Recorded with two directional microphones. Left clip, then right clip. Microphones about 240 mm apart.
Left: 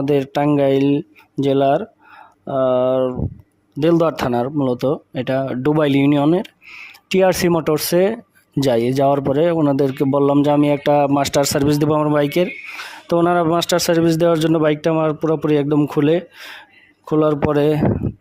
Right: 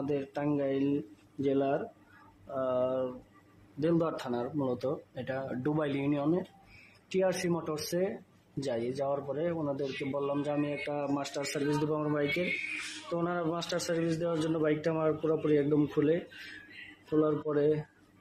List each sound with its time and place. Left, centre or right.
0.0 s a man's voice: left